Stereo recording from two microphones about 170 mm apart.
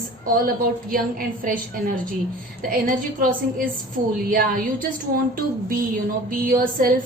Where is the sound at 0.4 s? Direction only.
55° right (ahead or behind).